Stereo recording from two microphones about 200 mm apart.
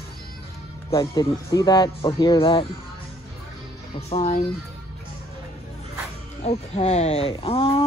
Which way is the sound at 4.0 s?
30° left (ahead or behind).